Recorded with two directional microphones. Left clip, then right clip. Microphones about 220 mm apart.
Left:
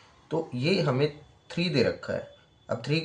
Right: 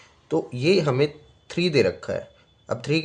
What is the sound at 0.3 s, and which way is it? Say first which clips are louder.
Speech: right 6 dB; 50° right (ahead or behind).